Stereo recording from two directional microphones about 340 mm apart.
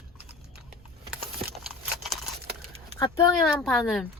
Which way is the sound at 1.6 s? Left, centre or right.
Centre.